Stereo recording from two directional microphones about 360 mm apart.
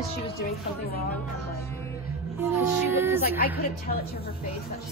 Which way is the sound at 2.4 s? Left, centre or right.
Centre.